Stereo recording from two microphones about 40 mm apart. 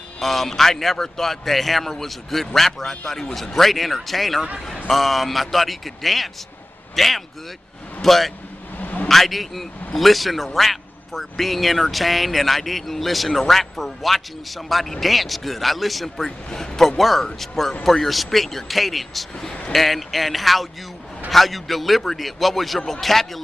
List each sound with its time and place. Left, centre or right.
0.2 s a man's voice: centre
8.7 s vehicle: left
9.1 s a man's voice: centre